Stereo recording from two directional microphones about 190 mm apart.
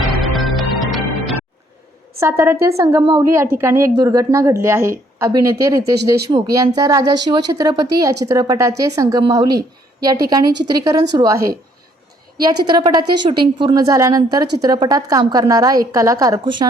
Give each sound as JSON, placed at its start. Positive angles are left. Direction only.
{"t": 0.2, "sound": "music", "side_deg": 0}
{"t": 2.2, "sound": "a woman's voice", "side_deg": -15}